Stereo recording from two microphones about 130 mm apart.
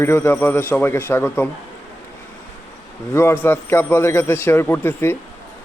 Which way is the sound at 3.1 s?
20° left (ahead or behind).